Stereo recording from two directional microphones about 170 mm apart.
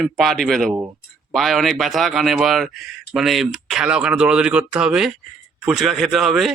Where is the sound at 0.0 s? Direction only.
Centre (ahead or behind).